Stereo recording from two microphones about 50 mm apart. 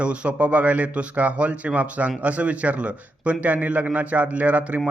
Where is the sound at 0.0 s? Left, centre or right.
Right.